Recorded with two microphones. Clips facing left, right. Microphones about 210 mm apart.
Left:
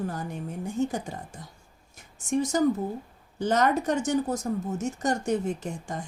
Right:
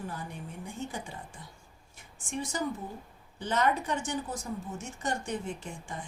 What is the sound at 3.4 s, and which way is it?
A woman's voice, 45° left (ahead or behind).